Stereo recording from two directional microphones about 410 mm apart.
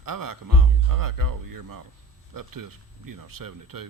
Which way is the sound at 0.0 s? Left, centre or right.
Right.